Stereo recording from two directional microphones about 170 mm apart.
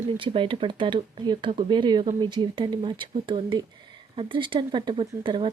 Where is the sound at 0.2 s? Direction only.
30° right (ahead or behind).